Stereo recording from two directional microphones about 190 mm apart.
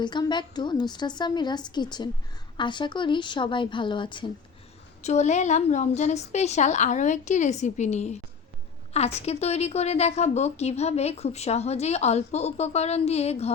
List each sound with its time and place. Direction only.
0.0 s a woman's voice: 25° left (ahead or behind)
5.0 s a woman's voice: 35° left (ahead or behind)